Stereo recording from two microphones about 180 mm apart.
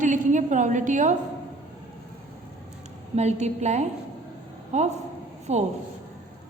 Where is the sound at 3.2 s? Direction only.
40° right (ahead or behind).